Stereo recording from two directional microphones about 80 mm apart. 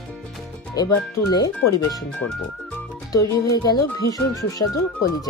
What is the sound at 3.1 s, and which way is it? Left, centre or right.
Speech, left.